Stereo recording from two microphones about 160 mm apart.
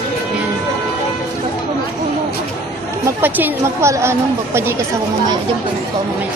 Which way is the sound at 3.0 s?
10° right (ahead or behind).